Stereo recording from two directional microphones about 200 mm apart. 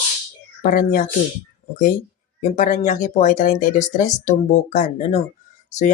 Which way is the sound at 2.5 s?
40° left (ahead or behind).